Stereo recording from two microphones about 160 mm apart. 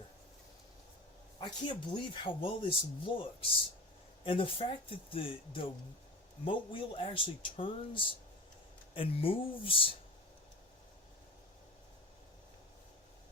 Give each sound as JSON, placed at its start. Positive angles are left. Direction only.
{"t": 1.4, "sound": "speech", "side_deg": 30}